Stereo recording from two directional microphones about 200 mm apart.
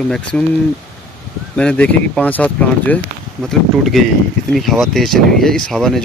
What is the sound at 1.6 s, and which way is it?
Speech, 5° left (ahead or behind).